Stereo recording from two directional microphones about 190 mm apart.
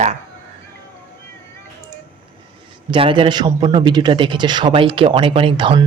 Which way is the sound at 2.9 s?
25° right (ahead or behind).